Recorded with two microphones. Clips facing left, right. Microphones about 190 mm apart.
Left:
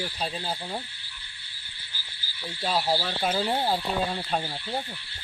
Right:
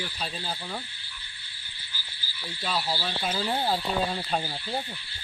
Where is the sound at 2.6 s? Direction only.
40° left (ahead or behind).